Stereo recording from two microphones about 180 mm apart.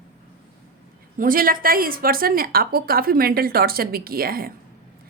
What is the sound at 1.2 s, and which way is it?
A woman's voice, 50° right (ahead or behind).